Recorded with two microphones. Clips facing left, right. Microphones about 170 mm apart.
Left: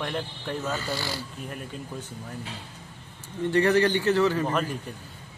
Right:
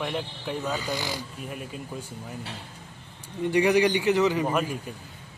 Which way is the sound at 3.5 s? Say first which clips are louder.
Even; 15° right (ahead or behind).